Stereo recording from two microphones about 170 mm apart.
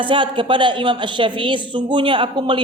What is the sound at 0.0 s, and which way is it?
A woman's voice, 30° right (ahead or behind).